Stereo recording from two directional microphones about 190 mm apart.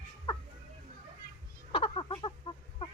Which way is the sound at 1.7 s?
25° left (ahead or behind).